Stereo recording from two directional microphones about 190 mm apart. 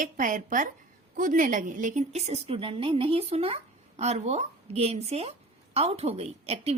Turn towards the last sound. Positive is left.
turn(degrees=-30)  # may be behind; listen again after turning